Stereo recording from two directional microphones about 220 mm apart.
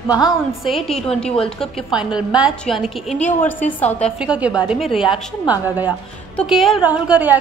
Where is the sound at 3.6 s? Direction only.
30° left (ahead or behind).